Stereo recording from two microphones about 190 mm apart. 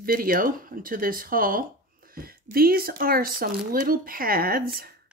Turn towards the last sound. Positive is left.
turn(degrees=-50)  # may be behind; listen again after turning